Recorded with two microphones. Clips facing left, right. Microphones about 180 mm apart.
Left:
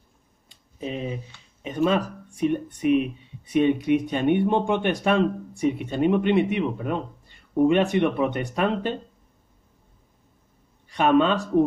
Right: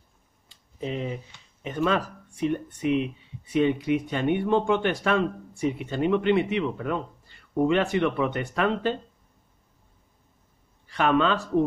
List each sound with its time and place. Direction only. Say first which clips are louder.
0.7 s speech: even; 20° left (ahead or behind)
2.8 s speech: left 4 dB; 20° right (ahead or behind)
3.4 s speech: left 3 dB; 20° left (ahead or behind)
10.9 s speech: left 3 dB; 20° left (ahead or behind)